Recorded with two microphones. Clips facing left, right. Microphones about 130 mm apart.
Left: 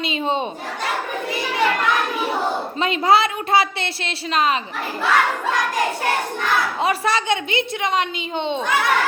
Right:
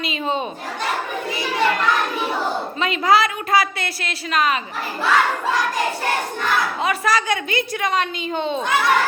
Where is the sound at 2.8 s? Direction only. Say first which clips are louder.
Left 1 dB; 30° left (ahead or behind).